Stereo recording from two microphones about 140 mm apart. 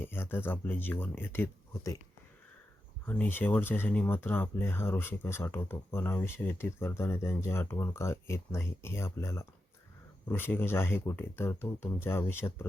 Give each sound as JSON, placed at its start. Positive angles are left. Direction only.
{"t": 0.0, "sound": "speech", "side_deg": 15}
{"t": 3.1, "sound": "speech", "side_deg": 15}